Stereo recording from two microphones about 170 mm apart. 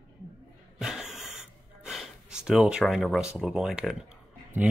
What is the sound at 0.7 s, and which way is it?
Gasp, 5° right (ahead or behind).